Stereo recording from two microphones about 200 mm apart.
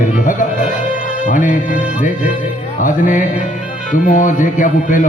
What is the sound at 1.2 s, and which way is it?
Speech, 40° left (ahead or behind).